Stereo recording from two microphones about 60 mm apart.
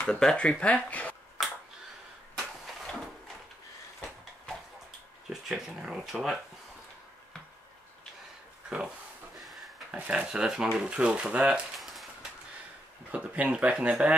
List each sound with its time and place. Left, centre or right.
0.0 s speech: centre
2.3 s vehicle: centre
5.3 s speech: centre
8.6 s a sound: centre
9.4 s a sound: centre
9.8 s speech: right
10.2 s speech: centre
11.8 s a sound: centre
13.1 s speech: right